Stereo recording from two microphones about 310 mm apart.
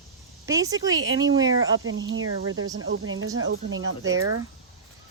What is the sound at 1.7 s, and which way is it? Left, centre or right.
Speech, right.